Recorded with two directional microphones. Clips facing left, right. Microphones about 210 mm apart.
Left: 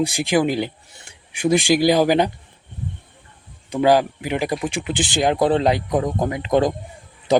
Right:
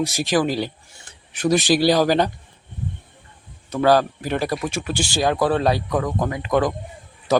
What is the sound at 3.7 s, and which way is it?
Speech, 15° left (ahead or behind).